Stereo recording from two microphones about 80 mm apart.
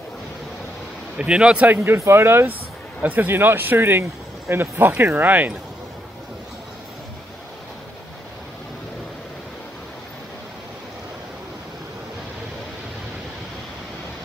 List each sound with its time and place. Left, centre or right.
1.1 s speech: centre
1.8 s speech: right